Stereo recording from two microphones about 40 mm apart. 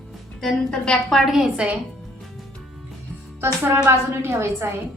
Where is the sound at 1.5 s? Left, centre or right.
Right.